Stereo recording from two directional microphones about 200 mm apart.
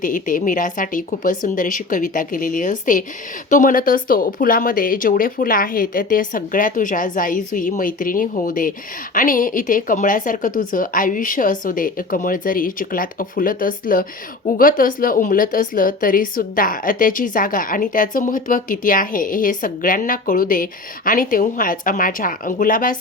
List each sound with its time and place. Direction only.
0.0 s a woman's voice: 40° left (ahead or behind)